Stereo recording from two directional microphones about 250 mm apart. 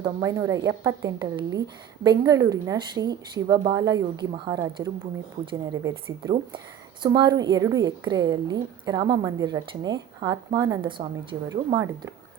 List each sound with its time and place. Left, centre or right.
0.0 s a woman's voice: centre